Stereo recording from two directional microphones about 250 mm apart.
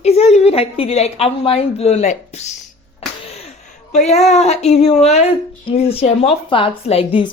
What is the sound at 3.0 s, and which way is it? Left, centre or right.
Music, left.